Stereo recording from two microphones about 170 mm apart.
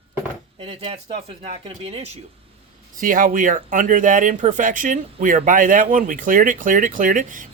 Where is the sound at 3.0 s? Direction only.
55° right (ahead or behind).